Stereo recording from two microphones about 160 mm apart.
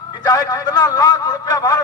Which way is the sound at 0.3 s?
25° left (ahead or behind).